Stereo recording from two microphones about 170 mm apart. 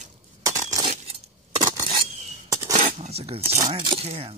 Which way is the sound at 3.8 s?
35° right (ahead or behind).